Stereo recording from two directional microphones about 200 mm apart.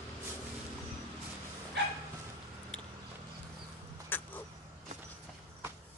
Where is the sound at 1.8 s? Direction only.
55° right (ahead or behind).